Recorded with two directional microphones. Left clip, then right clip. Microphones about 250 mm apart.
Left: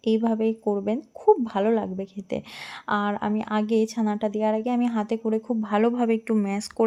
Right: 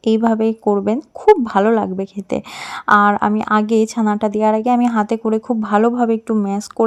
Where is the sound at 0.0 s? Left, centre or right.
Right.